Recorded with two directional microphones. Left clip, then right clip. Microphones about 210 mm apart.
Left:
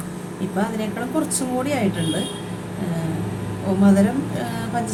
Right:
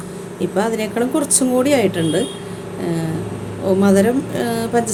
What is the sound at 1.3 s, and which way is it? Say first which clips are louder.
Speech: right 8 dB; 50° right (ahead or behind).